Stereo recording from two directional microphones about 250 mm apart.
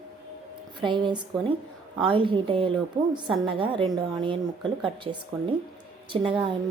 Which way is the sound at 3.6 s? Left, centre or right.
Centre.